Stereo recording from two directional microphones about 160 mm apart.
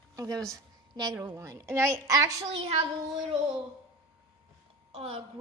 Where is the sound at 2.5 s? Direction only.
40° right (ahead or behind).